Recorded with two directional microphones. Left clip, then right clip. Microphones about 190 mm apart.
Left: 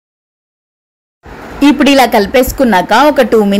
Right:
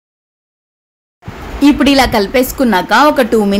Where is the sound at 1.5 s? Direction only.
20° left (ahead or behind).